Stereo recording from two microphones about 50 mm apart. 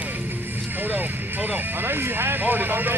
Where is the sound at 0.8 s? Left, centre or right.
Right.